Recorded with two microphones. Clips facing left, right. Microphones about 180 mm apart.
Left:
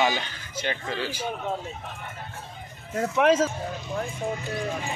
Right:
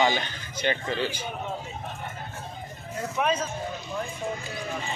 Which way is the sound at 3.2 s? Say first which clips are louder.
Left 6 dB; 90° left.